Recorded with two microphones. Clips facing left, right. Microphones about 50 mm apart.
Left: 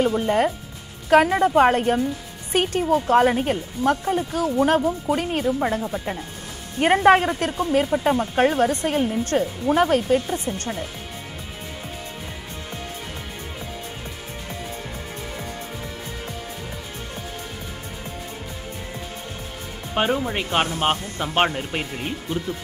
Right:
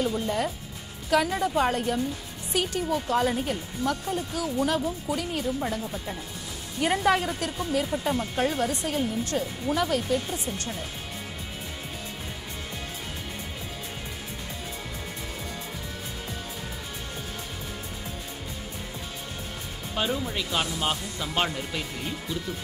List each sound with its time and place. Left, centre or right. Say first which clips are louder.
0.0 s speech: left 7 dB; left
19.9 s speech: left 7 dB; left